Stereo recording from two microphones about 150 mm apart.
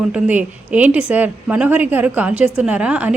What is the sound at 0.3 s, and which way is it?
A woman's voice, 10° right (ahead or behind).